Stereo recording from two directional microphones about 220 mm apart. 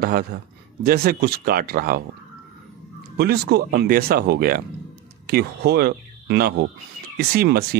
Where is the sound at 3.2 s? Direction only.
45° right (ahead or behind).